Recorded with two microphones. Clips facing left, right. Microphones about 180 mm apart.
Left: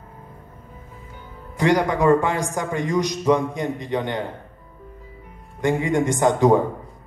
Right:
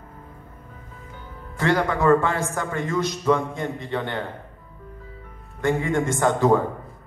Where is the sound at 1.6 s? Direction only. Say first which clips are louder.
Left 3 dB; 15° left (ahead or behind).